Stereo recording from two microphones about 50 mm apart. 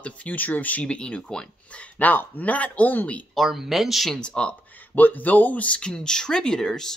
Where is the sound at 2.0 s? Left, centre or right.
Left.